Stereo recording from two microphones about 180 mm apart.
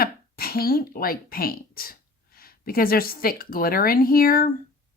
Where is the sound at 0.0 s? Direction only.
55° left (ahead or behind).